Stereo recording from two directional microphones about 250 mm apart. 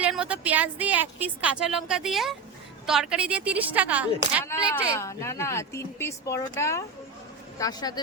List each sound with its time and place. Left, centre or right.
0.0 s a woman's voice: centre
4.7 s speech: centre